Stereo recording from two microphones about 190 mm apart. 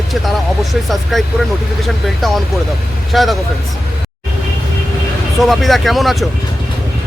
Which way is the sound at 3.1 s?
Centre (ahead or behind).